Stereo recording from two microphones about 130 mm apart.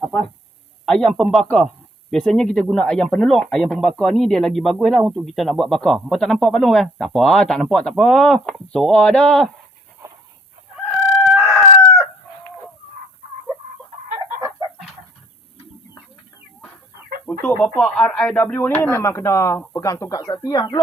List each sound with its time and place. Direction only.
0.0 s a sound: centre (ahead or behind)
0.9 s a man's voice: 5° left (ahead or behind)
11.3 s chicken: 5° right (ahead or behind)
17.2 s speech: 15° left (ahead or behind); by 20.8 s 35° left (ahead or behind)